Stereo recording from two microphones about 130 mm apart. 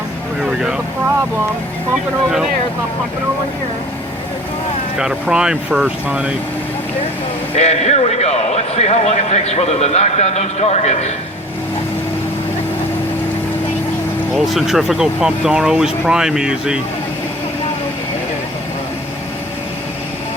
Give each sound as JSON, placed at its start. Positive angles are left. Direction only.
{"t": 0.6, "sound": "vehicle", "side_deg": -5}
{"t": 4.9, "sound": "speech", "side_deg": -5}
{"t": 7.5, "sound": "a man's voice", "side_deg": 55}
{"t": 14.3, "sound": "speech", "side_deg": 0}